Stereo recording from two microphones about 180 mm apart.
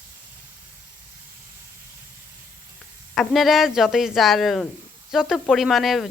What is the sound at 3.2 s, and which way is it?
A woman's voice, centre (ahead or behind).